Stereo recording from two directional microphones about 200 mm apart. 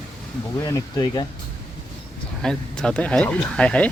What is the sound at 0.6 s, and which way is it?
Speech, 20° left (ahead or behind).